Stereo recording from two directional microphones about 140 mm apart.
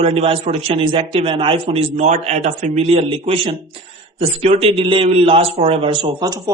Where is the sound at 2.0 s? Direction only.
55° right (ahead or behind).